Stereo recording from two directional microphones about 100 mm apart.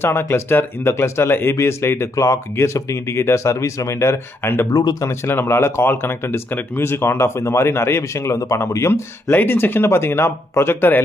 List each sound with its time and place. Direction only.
0.0 s speech: 25° left (ahead or behind)
4.6 s speech: 40° left (ahead or behind)
5.0 s speech: 25° left (ahead or behind)